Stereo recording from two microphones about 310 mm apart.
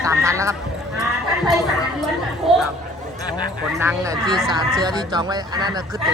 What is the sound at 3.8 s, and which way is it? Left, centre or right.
Speech, centre.